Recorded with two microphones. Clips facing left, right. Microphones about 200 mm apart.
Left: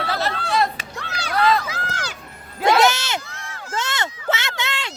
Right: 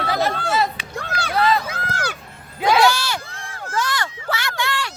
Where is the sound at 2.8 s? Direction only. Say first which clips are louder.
Right 1 dB; 20° left (ahead or behind).